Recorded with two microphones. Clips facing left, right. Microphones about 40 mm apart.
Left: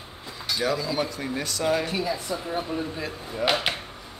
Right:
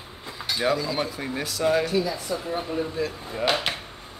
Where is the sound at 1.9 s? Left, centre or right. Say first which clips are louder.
Right 2 dB; left.